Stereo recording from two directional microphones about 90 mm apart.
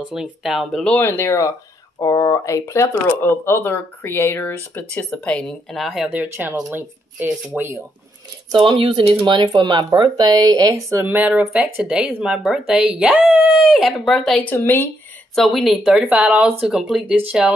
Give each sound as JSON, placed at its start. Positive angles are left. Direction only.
{"t": 0.1, "sound": "speech", "side_deg": -5}
{"t": 0.9, "sound": "speech", "side_deg": 25}
{"t": 2.0, "sound": "speech", "side_deg": 35}
{"t": 5.8, "sound": "speech", "side_deg": -5}
{"t": 6.0, "sound": "speech", "side_deg": -25}
{"t": 8.5, "sound": "speech", "side_deg": -75}
{"t": 9.2, "sound": "speech", "side_deg": -55}
{"t": 10.9, "sound": "speech", "side_deg": -25}
{"t": 13.7, "sound": "speech", "side_deg": 0}
{"t": 14.4, "sound": "speech", "side_deg": 20}
{"t": 15.3, "sound": "speech", "side_deg": 0}
{"t": 16.6, "sound": "speech", "side_deg": -5}
{"t": 17.3, "sound": "speech", "side_deg": -15}